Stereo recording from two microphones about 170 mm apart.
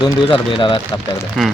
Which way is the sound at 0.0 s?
30° left (ahead or behind).